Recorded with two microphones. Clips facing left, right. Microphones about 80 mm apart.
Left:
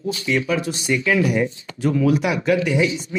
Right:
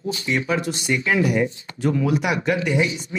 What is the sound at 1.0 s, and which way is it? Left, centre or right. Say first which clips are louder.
Speech: left 1 dB; right.